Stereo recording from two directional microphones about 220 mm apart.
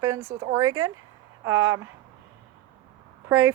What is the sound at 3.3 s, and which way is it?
Speech, 10° right (ahead or behind).